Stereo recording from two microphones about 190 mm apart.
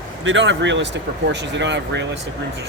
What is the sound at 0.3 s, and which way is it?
Speech, 75° right (ahead or behind).